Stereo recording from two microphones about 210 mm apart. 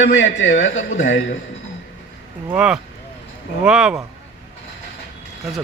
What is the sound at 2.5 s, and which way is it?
Speech, 5° right (ahead or behind).